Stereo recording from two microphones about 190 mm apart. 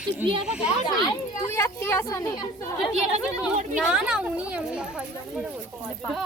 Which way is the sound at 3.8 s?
5° right (ahead or behind).